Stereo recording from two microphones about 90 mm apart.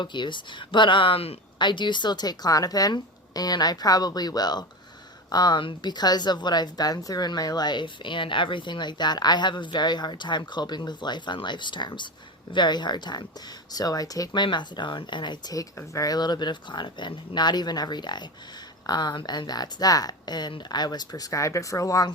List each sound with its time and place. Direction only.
0.0 s a woman's voice: 60° left (ahead or behind); by 14.4 s 40° left (ahead or behind)
14.4 s speech: 60° left (ahead or behind)
15.9 s a woman's voice: 40° left (ahead or behind)